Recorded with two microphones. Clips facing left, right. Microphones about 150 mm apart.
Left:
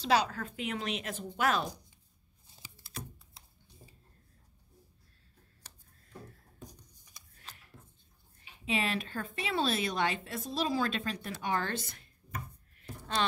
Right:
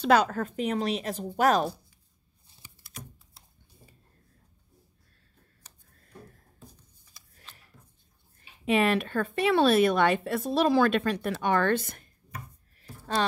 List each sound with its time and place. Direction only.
0.0 s a woman's voice: 50° right (ahead or behind)
6.6 s a sound: 15° left (ahead or behind)
8.6 s speech: 55° right (ahead or behind)
13.2 s a woman's voice: 40° right (ahead or behind)